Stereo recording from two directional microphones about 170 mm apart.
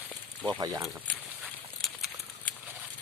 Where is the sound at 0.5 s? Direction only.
20° right (ahead or behind).